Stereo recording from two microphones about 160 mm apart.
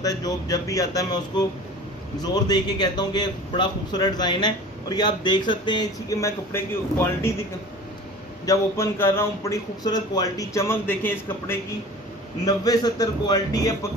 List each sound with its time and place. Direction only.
0.0 s a man's voice: 20° left (ahead or behind)
8.5 s a man's voice: 15° left (ahead or behind)